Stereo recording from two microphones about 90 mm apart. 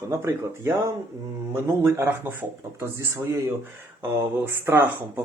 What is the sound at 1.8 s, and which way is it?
Speech, 30° right (ahead or behind).